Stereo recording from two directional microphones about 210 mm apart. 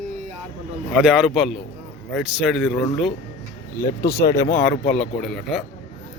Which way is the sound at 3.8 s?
15° left (ahead or behind).